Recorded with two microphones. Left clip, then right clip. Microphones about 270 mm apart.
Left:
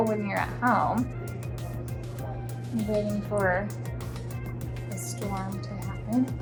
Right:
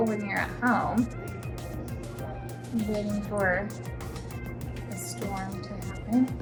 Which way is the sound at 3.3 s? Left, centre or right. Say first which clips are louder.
Left 1 dB; centre.